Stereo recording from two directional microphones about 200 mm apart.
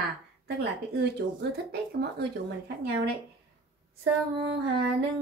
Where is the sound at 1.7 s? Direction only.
55° right (ahead or behind).